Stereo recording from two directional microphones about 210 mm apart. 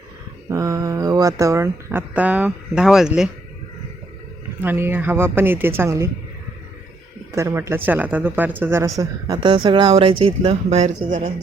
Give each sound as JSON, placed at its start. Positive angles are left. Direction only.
{"t": 0.5, "sound": "speech", "side_deg": -15}
{"t": 4.6, "sound": "speech", "side_deg": -10}
{"t": 7.3, "sound": "speech", "side_deg": -15}